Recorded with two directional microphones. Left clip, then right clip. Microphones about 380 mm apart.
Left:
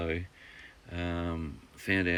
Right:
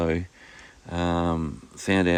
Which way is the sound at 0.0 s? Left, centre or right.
Right.